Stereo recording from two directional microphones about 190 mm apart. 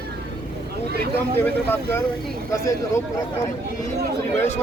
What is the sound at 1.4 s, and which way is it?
Speech, 10° left (ahead or behind).